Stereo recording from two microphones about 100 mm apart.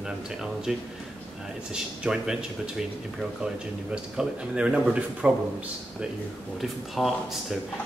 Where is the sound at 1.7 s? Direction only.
10° right (ahead or behind).